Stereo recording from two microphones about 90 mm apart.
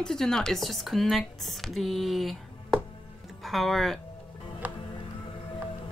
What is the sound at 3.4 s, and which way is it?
Speech, centre (ahead or behind).